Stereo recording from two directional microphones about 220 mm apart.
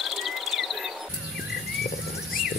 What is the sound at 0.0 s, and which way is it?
Cricket, centre (ahead or behind).